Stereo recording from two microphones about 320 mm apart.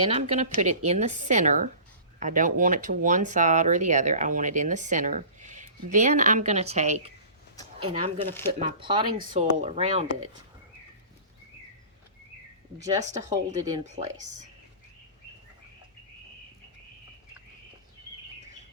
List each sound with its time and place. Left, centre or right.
0.0 s speech: centre
8.3 s speech: centre
8.8 s speech: centre
13.0 s speech: right
13.3 s speech: centre
13.9 s speech: right